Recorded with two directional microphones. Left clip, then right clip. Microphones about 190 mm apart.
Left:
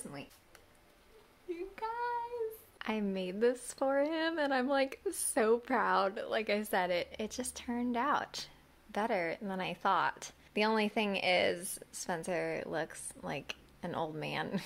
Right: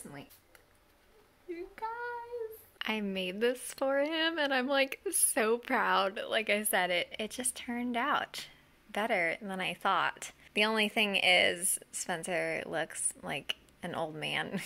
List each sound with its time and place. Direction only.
1.8 s child singing: centre (ahead or behind)
2.8 s speech: centre (ahead or behind)
11.6 s a woman's voice: 25° right (ahead or behind)
12.0 s speech: 5° right (ahead or behind)